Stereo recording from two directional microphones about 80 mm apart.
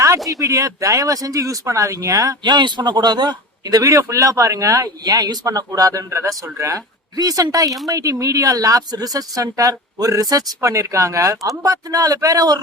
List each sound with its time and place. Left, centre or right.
0.3 s speech: right
2.4 s speech: right
7.2 s speech: right